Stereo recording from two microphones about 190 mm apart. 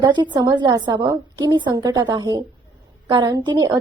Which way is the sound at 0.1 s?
25° right (ahead or behind).